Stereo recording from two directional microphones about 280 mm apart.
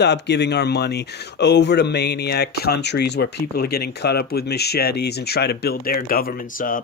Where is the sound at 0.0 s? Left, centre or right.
Left.